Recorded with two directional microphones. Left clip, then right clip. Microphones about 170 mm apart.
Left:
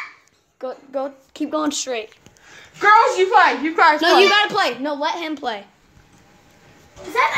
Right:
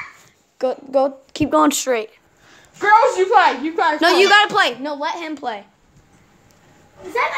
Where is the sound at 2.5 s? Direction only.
30° right (ahead or behind).